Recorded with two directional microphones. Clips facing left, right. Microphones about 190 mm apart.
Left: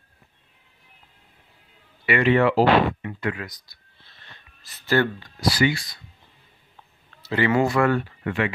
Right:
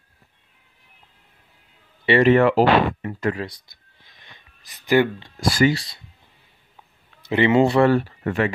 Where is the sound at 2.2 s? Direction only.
45° right (ahead or behind).